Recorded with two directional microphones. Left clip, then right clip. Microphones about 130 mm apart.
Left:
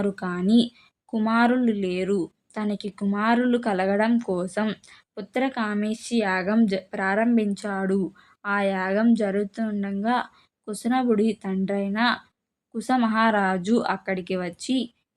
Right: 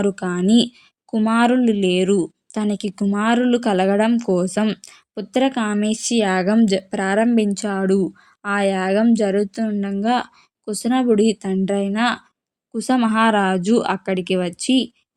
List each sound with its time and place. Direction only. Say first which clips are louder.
0.0 s speech: right 6 dB; 45° right (ahead or behind)